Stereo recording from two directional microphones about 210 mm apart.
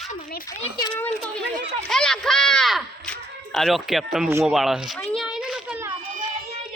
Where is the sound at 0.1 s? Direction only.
40° left (ahead or behind).